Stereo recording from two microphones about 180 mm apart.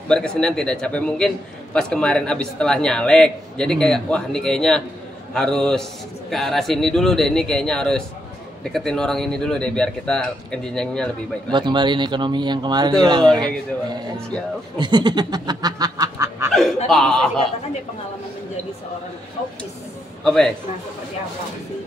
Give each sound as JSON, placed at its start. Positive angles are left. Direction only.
{"t": 0.1, "sound": "a man's voice", "side_deg": 5}
{"t": 11.5, "sound": "speech", "side_deg": -25}
{"t": 14.8, "sound": "goose", "side_deg": -25}
{"t": 16.5, "sound": "a man's voice", "side_deg": 0}
{"t": 20.2, "sound": "a man's voice", "side_deg": 5}